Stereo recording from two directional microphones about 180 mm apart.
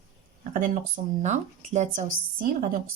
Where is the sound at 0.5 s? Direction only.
45° right (ahead or behind).